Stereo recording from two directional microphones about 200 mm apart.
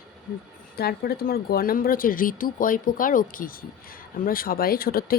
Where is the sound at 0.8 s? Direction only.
50° left (ahead or behind).